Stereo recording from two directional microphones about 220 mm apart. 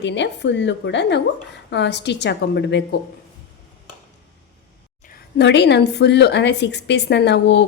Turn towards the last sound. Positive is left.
turn(degrees=50)  # may be behind; listen again after turning